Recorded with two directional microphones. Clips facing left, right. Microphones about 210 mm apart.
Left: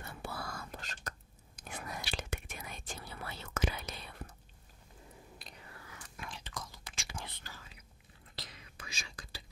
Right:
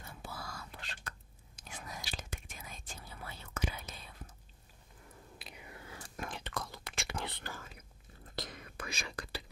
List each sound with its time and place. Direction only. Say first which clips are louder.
0.0 s whispering: left 4 dB; 70° left (ahead or behind); by 1.1 s 40° left (ahead or behind)
1.6 s whispering: left 4 dB; 60° left (ahead or behind)
5.4 s whispering: right 2 dB; 10° right (ahead or behind)
5.7 s whispering: right 5 dB; 25° right (ahead or behind)
5.9 s whispering: right 6 dB; 35° right (ahead or behind)
6.2 s whispering: right 4 dB; 60° right (ahead or behind)